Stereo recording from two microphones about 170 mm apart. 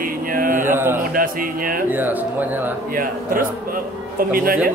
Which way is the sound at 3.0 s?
55° right (ahead or behind).